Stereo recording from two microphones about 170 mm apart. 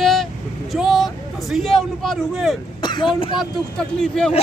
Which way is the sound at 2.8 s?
25° left (ahead or behind).